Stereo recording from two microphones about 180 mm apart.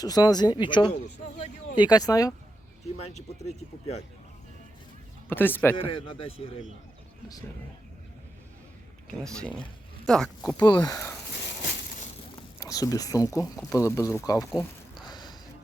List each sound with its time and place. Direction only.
0.0 s speech: 20° left (ahead or behind)
3.0 s speech: 35° left (ahead or behind)
5.3 s speech: 10° left (ahead or behind)
5.7 s speech: 30° left (ahead or behind)
9.1 s speech: 5° left (ahead or behind)
10.6 s speech: 20° left (ahead or behind)
12.5 s speech: 20° left (ahead or behind)
15.0 s music: 25° left (ahead or behind)